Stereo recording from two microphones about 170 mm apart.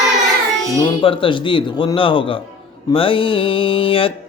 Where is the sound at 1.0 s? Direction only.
30° left (ahead or behind).